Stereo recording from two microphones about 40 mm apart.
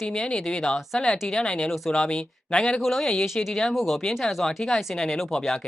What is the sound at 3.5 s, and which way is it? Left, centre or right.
Speech, centre.